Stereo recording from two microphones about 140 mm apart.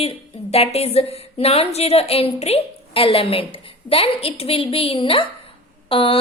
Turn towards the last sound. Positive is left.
turn(degrees=40)  # may be behind; listen again after turning